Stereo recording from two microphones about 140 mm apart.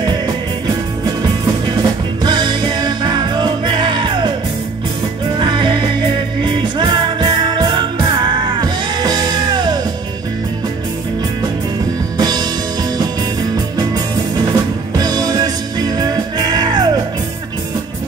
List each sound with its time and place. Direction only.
1.8 s music: 35° right (ahead or behind)
5.4 s music: 35° right (ahead or behind)
12.2 s music: 30° right (ahead or behind)
13.7 s music: 30° right (ahead or behind)